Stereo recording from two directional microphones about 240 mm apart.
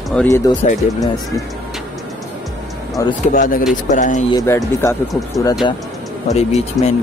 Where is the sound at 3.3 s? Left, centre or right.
Left.